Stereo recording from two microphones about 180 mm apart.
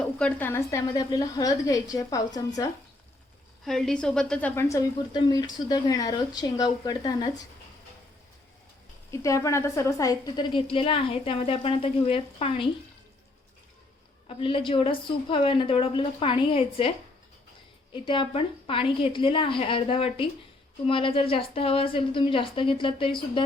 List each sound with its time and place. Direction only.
0.0 s a woman's voice: 5° left (ahead or behind)
3.7 s a woman's voice: centre (ahead or behind); by 7.4 s 20° left (ahead or behind)
9.2 s a woman's voice: 15° left (ahead or behind)
14.3 s a woman's voice: 30° left (ahead or behind)
17.9 s a woman's voice: 25° left (ahead or behind)